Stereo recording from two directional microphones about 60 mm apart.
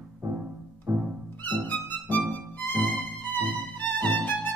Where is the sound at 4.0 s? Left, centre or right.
Left.